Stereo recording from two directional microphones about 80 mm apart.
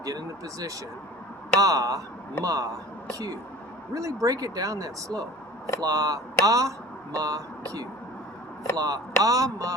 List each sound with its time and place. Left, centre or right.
0.0 s speech: right
3.9 s speech: right